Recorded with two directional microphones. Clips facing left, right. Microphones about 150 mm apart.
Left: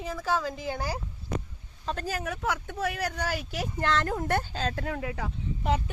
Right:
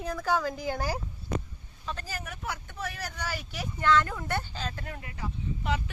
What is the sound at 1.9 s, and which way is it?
Speech, 75° left (ahead or behind).